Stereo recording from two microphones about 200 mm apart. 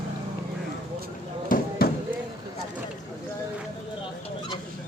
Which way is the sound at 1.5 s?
45° left (ahead or behind).